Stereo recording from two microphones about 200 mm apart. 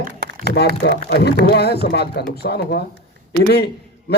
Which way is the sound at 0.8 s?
55° left (ahead or behind).